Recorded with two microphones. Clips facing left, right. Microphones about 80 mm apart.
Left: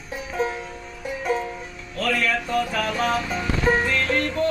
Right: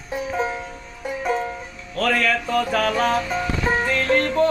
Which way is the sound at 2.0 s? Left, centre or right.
Right.